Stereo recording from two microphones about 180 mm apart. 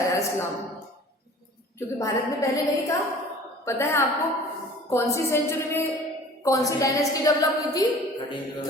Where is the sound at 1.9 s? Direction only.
15° left (ahead or behind).